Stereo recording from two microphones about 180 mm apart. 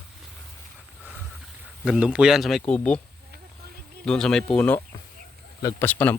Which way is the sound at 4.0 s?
5° left (ahead or behind).